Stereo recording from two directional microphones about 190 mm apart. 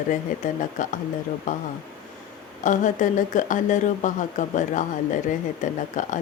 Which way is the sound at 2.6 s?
40° left (ahead or behind).